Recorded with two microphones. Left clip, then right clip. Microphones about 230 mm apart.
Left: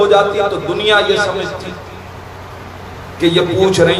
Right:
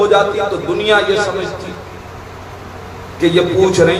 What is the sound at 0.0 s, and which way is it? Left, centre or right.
A man's voice, left.